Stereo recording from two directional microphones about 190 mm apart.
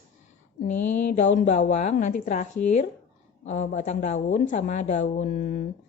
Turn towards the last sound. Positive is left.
turn(degrees=45)  # may be behind; listen again after turning